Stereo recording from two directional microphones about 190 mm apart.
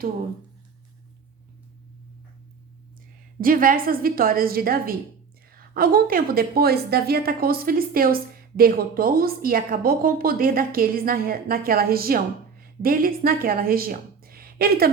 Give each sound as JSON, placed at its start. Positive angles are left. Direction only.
{"t": 3.4, "sound": "a woman's voice", "side_deg": -45}